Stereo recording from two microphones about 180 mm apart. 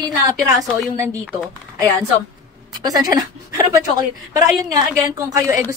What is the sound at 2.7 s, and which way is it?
A woman's voice, 20° right (ahead or behind).